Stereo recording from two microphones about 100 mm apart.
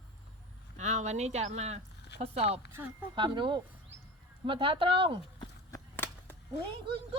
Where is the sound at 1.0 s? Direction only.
90° right.